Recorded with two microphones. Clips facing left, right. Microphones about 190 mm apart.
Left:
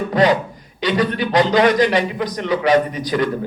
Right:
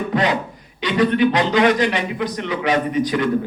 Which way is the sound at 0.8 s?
40° left (ahead or behind).